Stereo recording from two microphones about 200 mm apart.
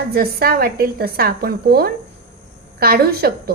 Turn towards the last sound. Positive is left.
turn(degrees=-50)  # may be behind; listen again after turning